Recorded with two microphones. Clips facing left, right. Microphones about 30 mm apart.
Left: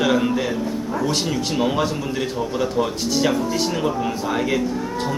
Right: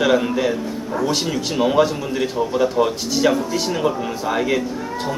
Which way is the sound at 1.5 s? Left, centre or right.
Centre.